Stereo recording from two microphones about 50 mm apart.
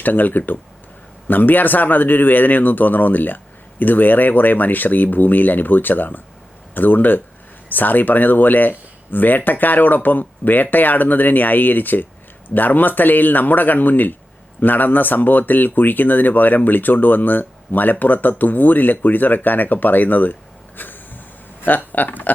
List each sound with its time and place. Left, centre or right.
0.0 s speech: left
20.7 s a sound: left
21.9 s speech: left